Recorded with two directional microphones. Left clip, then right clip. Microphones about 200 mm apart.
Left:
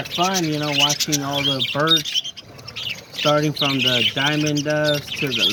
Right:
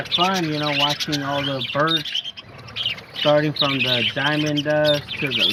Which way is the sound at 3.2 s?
Centre (ahead or behind).